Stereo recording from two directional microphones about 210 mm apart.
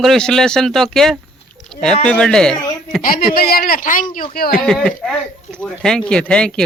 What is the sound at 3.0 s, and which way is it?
A man's voice, 45° left (ahead or behind).